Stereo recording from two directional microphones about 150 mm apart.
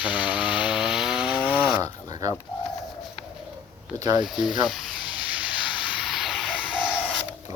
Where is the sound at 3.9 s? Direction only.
25° right (ahead or behind).